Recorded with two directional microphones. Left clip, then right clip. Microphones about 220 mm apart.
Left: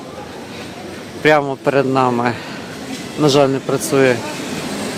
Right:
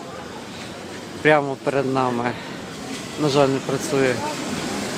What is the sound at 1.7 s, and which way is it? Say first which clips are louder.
Speech: left 7 dB; 15° left (ahead or behind).